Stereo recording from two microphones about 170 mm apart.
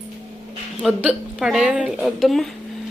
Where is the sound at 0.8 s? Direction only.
5° right (ahead or behind).